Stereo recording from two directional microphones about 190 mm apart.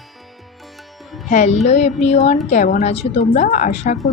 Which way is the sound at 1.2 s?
40° left (ahead or behind).